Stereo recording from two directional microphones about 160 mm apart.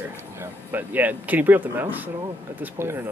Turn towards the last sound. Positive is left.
turn(degrees=-15)  # may be behind; listen again after turning